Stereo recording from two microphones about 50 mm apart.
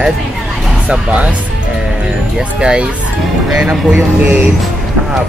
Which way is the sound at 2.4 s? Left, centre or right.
Right.